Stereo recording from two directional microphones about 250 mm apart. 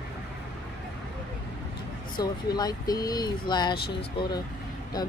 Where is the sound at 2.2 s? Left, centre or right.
Centre.